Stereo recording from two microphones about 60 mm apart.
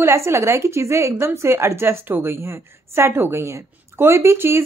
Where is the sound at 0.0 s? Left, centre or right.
Right.